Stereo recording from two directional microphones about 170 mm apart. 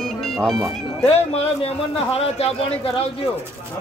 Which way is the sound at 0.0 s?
Centre (ahead or behind).